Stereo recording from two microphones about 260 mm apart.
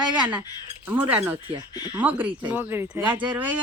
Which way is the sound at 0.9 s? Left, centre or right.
Centre.